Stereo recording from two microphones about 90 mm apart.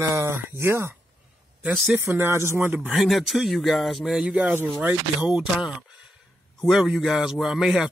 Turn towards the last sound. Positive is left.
turn(degrees=-5)  # may be behind; listen again after turning